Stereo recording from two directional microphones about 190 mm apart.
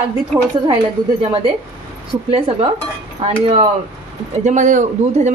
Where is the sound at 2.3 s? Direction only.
30° right (ahead or behind).